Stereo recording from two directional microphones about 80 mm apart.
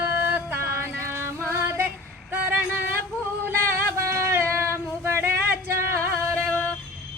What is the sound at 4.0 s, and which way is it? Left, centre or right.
Female singing, right.